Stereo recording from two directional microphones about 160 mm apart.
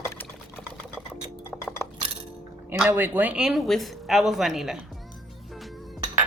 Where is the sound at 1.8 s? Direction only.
15° left (ahead or behind).